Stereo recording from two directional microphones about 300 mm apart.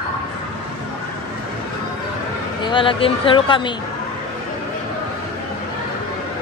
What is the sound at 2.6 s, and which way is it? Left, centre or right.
Speech, centre.